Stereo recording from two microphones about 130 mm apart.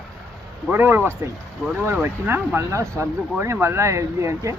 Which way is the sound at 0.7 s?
15° right (ahead or behind).